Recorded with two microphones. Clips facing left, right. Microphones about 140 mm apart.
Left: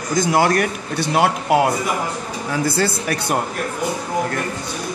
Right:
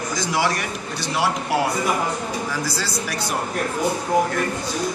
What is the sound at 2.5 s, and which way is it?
Speech, 60° left (ahead or behind).